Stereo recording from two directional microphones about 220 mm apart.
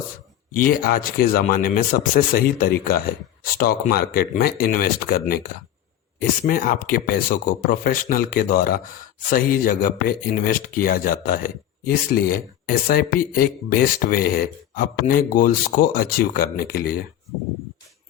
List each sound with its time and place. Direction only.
0.5 s speech: 40° left (ahead or behind)
6.4 s speech: 40° left (ahead or behind)